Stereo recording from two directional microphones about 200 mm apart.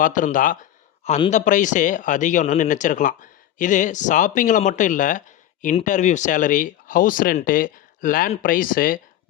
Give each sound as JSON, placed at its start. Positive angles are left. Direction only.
{"t": 0.0, "sound": "speech", "side_deg": 40}